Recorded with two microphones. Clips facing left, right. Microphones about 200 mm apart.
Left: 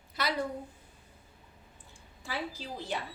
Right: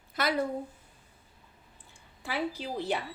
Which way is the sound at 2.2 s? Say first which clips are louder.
Right 5 dB; 60° right (ahead or behind).